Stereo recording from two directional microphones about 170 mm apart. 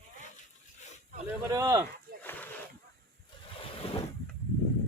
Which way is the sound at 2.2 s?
10° left (ahead or behind).